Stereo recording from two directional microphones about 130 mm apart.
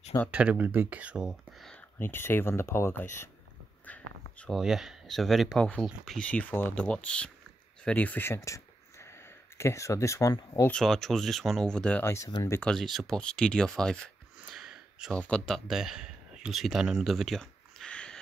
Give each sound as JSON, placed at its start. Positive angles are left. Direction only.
{"t": 0.3, "sound": "speech", "side_deg": -10}
{"t": 2.0, "sound": "speech", "side_deg": 15}
{"t": 3.8, "sound": "a sound", "side_deg": 10}
{"t": 4.6, "sound": "speech", "side_deg": -5}
{"t": 10.7, "sound": "speech", "side_deg": 5}
{"t": 12.0, "sound": "speech", "side_deg": 20}
{"t": 12.6, "sound": "speech", "side_deg": 0}
{"t": 14.4, "sound": "gasp", "side_deg": -5}
{"t": 15.1, "sound": "speech", "side_deg": 10}